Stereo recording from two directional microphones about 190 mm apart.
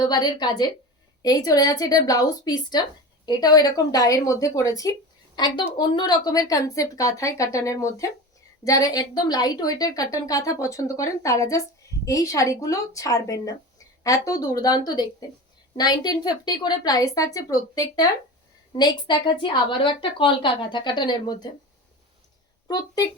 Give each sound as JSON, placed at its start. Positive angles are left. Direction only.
{"t": 0.0, "sound": "a woman's voice", "side_deg": 20}
{"t": 22.6, "sound": "a woman's voice", "side_deg": 20}